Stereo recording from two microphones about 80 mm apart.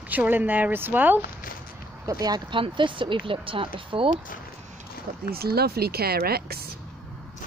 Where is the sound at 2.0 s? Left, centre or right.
Right.